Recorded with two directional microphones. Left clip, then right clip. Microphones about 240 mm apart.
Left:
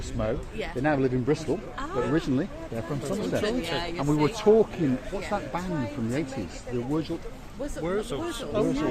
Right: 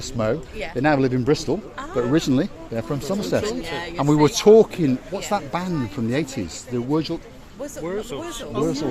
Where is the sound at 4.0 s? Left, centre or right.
Right.